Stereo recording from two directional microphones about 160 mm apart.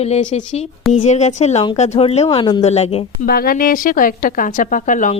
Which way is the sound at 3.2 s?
70° left (ahead or behind).